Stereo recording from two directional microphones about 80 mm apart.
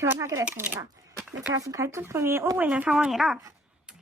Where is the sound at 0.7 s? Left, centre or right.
Right.